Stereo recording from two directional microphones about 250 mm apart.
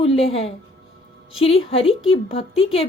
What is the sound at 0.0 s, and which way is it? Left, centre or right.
A woman's voice, left.